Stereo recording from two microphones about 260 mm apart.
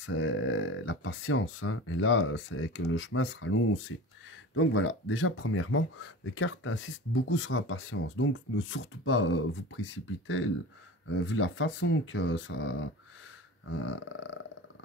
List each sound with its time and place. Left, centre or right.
0.0 s speech: left